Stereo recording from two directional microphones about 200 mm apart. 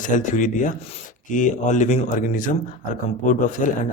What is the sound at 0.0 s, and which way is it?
A man's voice, 40° left (ahead or behind).